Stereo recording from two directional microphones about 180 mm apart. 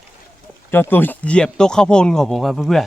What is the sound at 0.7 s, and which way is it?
Speech, 10° left (ahead or behind).